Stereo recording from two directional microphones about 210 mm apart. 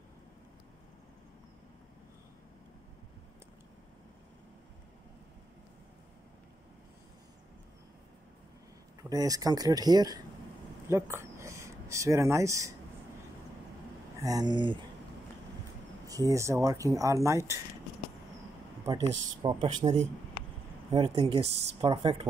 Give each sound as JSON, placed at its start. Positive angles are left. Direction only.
{"t": 9.1, "sound": "speech", "side_deg": -15}
{"t": 14.2, "sound": "speech", "side_deg": -20}
{"t": 16.1, "sound": "speech", "side_deg": -15}
{"t": 18.9, "sound": "speech", "side_deg": -15}
{"t": 21.5, "sound": "speech", "side_deg": -55}
{"t": 21.8, "sound": "speech", "side_deg": -20}